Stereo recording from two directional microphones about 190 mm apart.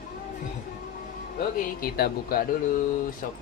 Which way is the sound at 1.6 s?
50° left (ahead or behind).